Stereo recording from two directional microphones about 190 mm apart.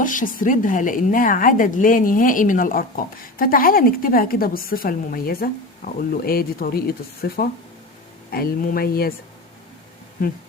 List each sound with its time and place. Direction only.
0.0 s a woman's voice: 45° left (ahead or behind)
10.2 s a woman's voice: 45° left (ahead or behind)